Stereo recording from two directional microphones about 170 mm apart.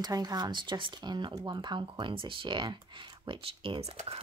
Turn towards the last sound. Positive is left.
turn(degrees=-35)  # may be behind; listen again after turning